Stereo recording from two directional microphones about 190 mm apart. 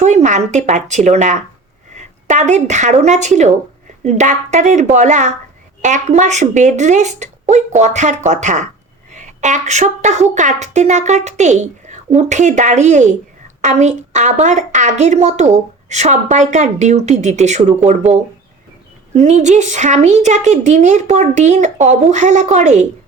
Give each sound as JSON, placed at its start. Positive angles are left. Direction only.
{"t": 0.0, "sound": "a woman's voice", "side_deg": -40}
{"t": 19.1, "sound": "a woman's voice", "side_deg": -35}